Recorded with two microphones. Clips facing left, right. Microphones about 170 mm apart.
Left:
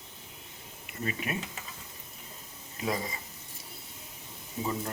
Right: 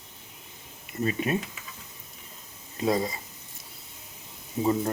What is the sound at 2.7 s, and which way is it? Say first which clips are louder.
Speech: right 7 dB; 30° right (ahead or behind).